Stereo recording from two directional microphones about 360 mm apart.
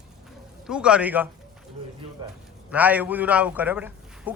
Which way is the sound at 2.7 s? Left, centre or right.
Centre.